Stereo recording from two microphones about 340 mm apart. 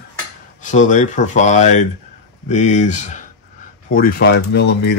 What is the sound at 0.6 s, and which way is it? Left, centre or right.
Speech, left.